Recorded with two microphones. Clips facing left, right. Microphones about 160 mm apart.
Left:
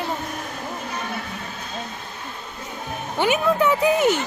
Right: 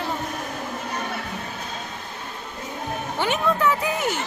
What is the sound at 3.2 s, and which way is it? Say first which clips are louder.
Speech: left 4 dB; 15° left (ahead or behind).